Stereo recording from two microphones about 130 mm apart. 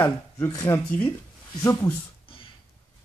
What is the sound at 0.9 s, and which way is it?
Speech, 10° left (ahead or behind).